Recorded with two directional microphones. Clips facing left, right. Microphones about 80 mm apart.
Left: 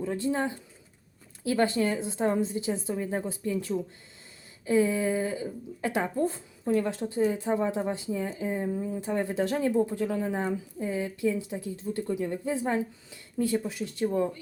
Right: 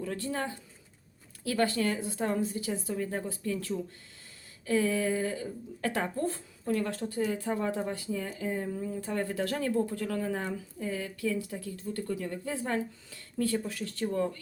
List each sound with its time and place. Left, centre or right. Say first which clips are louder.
0.0 s speech: left 5 dB; centre